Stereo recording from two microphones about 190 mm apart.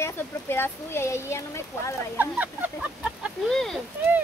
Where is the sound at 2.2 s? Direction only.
10° right (ahead or behind).